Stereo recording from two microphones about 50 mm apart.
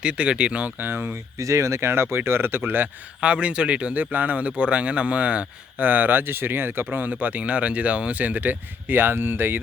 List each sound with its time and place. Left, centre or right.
0.0 s speech: right
0.8 s speech: right
3.2 s speech: right
5.8 s speech: right